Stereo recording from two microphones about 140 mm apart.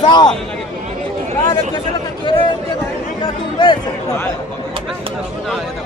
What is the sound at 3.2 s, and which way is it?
Speech, 35° left (ahead or behind).